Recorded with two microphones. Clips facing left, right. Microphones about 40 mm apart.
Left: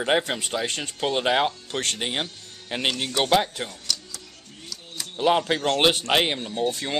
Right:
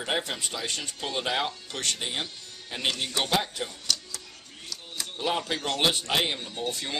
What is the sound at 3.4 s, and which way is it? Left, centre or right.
Speech, left.